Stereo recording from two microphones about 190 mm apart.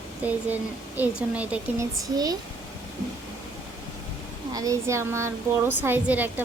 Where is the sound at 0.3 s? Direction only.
10° right (ahead or behind).